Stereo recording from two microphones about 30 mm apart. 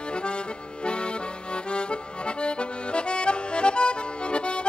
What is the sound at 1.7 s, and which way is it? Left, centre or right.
Accordion, left.